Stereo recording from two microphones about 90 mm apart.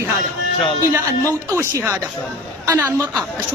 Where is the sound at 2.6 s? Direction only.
20° right (ahead or behind).